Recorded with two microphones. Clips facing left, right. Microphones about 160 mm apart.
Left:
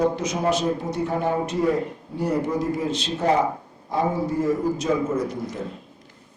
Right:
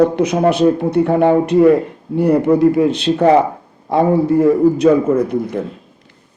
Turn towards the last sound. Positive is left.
turn(degrees=-60)  # may be behind; listen again after turning